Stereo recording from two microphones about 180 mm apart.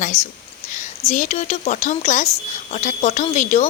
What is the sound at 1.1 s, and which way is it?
A woman's voice, 45° left (ahead or behind).